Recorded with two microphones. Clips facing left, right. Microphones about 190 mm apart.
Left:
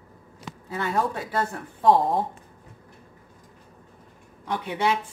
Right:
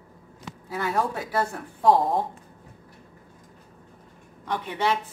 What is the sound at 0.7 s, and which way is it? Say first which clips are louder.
A woman's voice: even; centre (ahead or behind).